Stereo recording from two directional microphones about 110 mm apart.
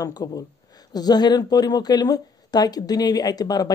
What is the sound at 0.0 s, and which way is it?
Speech, 35° left (ahead or behind).